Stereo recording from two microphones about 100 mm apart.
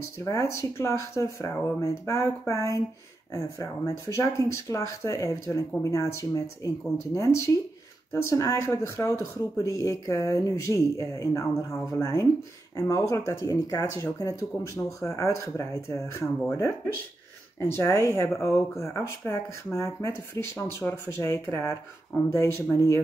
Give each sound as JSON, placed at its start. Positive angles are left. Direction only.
{"t": 0.2, "sound": "speech", "side_deg": 30}
{"t": 17.6, "sound": "speech", "side_deg": 25}